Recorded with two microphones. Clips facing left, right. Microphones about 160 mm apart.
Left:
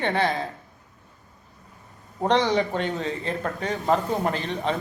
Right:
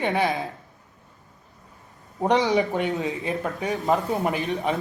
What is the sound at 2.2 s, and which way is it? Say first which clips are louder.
Speech: right 1 dB; 15° right (ahead or behind).